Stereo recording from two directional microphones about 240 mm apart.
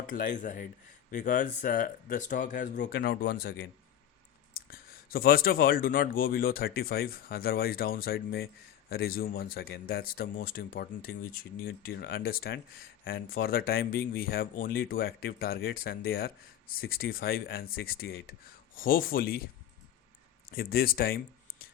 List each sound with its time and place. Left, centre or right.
0.1 s speech: left
20.5 s speech: left